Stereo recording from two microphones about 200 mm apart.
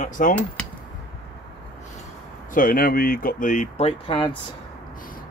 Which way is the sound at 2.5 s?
45° left (ahead or behind).